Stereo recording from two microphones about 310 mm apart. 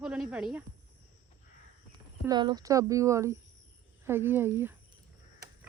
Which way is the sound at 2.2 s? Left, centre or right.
Centre.